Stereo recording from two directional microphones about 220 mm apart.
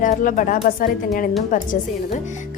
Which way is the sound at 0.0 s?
35° left (ahead or behind).